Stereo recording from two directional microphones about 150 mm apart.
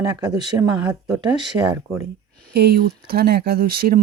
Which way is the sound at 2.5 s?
90° right.